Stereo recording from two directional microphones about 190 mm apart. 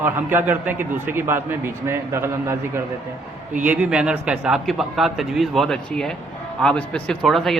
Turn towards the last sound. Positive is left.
turn(degrees=0)  # may be behind; listen again after turning